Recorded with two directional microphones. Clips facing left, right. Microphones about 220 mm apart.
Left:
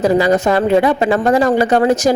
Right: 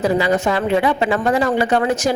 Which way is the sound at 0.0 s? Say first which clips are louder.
Left 4 dB; 40° left (ahead or behind).